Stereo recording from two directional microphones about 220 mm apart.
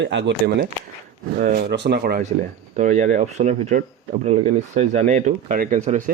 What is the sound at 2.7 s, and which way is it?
Speech, 35° right (ahead or behind).